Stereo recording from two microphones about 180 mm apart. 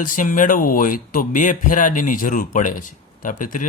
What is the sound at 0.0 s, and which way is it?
Speech, 50° left (ahead or behind).